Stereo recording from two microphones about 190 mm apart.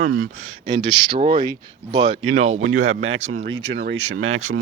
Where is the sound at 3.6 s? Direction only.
65° right (ahead or behind); by 4.6 s 90° right.